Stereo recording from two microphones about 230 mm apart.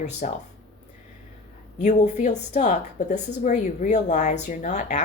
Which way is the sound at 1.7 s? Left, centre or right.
Left.